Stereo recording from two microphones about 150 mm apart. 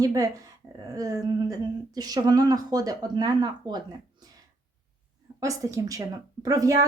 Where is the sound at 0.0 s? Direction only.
25° right (ahead or behind).